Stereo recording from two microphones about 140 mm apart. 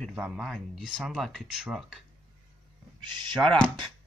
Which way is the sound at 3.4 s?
20° right (ahead or behind).